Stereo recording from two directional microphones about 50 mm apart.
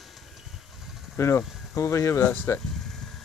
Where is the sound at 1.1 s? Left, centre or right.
Left.